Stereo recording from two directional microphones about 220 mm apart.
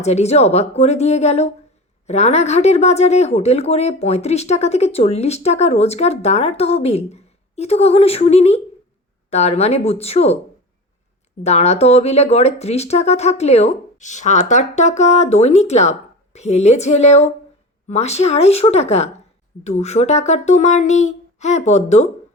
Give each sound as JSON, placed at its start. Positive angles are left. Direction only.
{"t": 0.0, "sound": "speech", "side_deg": 30}
{"t": 11.4, "sound": "speech", "side_deg": 30}